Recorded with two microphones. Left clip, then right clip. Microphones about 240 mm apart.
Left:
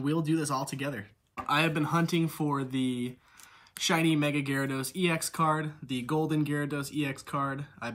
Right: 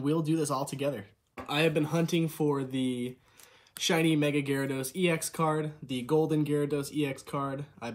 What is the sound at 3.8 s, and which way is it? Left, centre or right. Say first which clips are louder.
Speech: even; left.